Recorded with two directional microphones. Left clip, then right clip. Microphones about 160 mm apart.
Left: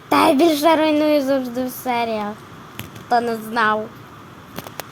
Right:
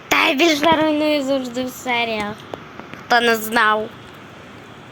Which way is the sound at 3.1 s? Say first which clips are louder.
Right 4 dB; centre (ahead or behind).